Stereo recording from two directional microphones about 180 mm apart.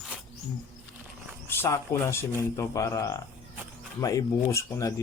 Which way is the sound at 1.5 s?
15° left (ahead or behind).